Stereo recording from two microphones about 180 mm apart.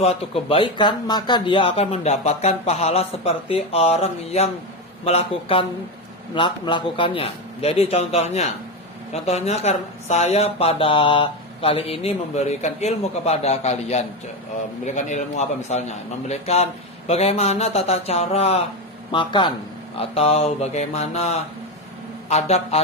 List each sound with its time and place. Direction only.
0.0 s a man's voice: 35° left (ahead or behind)